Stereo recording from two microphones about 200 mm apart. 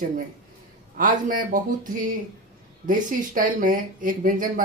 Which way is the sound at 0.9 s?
40° right (ahead or behind).